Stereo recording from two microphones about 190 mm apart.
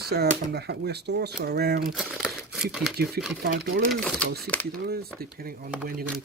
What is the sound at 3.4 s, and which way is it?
Speech, 45° right (ahead or behind).